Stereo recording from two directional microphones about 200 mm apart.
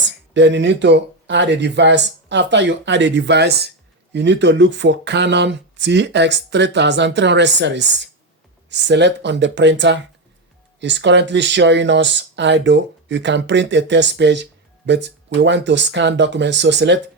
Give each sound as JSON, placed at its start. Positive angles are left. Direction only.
{"t": 0.0, "sound": "speech", "side_deg": -65}